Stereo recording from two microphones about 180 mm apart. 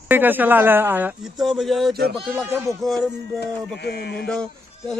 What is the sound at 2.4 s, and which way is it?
Speech, 15° right (ahead or behind).